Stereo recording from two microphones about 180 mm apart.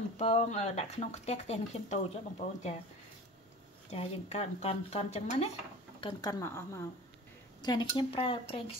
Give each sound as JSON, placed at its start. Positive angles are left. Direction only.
{"t": 0.2, "sound": "speech", "side_deg": 40}
{"t": 3.9, "sound": "speech", "side_deg": 35}
{"t": 5.9, "sound": "speech", "side_deg": 25}
{"t": 7.6, "sound": "speech", "side_deg": 25}